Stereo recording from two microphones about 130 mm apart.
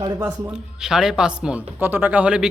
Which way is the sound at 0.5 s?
5° right (ahead or behind).